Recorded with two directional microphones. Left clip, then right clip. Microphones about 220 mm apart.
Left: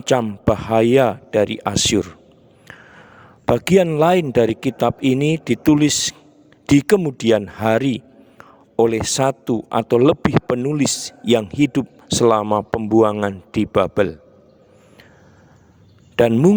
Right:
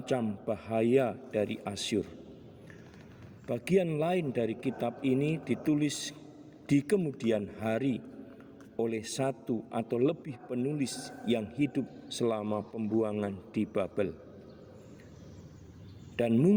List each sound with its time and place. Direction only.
0.0 s a man's voice: 50° left (ahead or behind)
3.5 s a man's voice: 50° left (ahead or behind)
16.1 s a man's voice: 50° left (ahead or behind)